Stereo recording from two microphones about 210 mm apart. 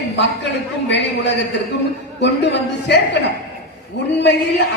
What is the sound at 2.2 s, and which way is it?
Speech, 55° left (ahead or behind).